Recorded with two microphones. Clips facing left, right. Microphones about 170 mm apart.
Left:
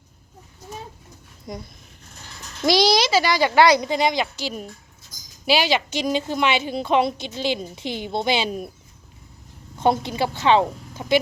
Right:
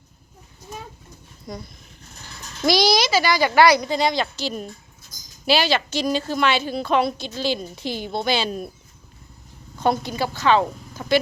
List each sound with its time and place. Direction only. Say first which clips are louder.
1.5 s speech: even; 20° left (ahead or behind)
2.6 s speech: left 1 dB; 25° left (ahead or behind)
9.7 s a woman's voice: left 1 dB; 25° left (ahead or behind)